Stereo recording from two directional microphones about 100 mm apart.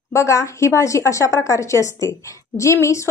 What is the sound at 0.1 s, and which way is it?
A woman's voice, 30° left (ahead or behind).